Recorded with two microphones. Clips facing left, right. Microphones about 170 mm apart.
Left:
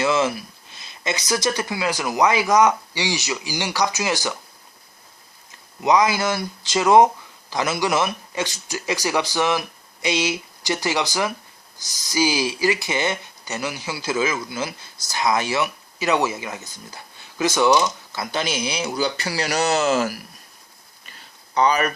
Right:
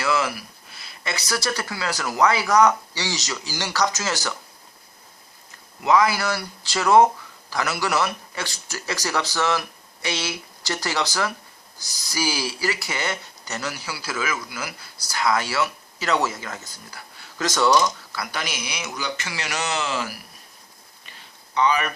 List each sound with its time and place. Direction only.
0.0 s speech: 20° left (ahead or behind)
5.8 s speech: 20° left (ahead or behind)
18.1 s speech: 25° left (ahead or behind); by 20.1 s 45° left (ahead or behind)
21.5 s speech: 40° left (ahead or behind)